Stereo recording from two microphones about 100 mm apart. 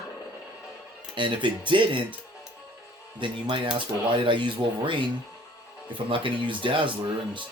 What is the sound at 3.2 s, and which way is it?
Speech, 50° right (ahead or behind).